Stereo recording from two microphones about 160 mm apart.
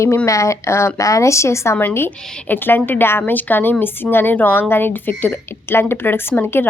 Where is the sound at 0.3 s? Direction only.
20° left (ahead or behind).